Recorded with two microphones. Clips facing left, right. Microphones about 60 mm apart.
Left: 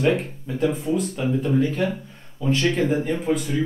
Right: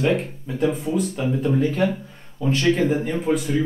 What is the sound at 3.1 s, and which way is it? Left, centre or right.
Speech, centre.